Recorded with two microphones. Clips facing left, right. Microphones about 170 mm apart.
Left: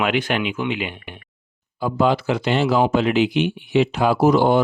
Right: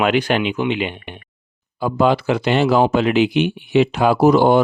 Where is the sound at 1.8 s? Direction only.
65° right (ahead or behind).